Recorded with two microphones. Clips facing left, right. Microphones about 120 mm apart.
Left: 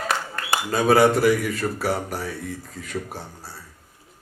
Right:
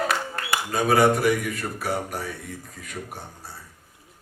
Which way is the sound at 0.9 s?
30° left (ahead or behind).